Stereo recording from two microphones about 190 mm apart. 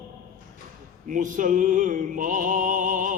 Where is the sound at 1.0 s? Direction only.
45° right (ahead or behind).